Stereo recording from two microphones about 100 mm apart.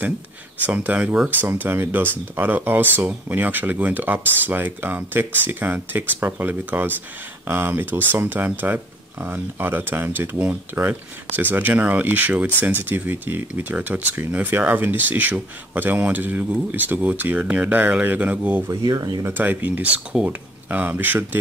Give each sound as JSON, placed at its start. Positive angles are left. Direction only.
{"t": 0.7, "sound": "speech", "side_deg": -15}
{"t": 18.7, "sound": "speech", "side_deg": -40}
{"t": 19.3, "sound": "speech", "side_deg": -20}